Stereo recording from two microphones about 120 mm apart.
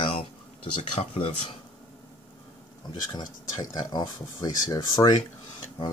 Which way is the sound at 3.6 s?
35° left (ahead or behind).